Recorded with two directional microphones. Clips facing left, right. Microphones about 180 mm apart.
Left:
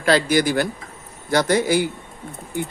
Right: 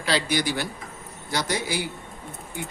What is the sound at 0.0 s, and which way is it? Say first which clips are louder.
Speech: left 7 dB; 50° left (ahead or behind).